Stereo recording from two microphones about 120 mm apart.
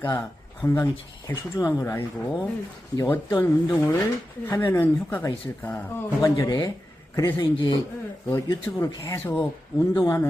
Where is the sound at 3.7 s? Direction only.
20° left (ahead or behind).